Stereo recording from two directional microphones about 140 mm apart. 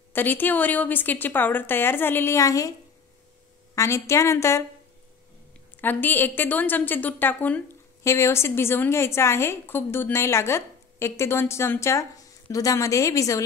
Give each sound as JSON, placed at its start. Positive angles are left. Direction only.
{"t": 0.1, "sound": "a woman's voice", "side_deg": 15}
{"t": 3.7, "sound": "a woman's voice", "side_deg": 20}
{"t": 5.8, "sound": "a woman's voice", "side_deg": 15}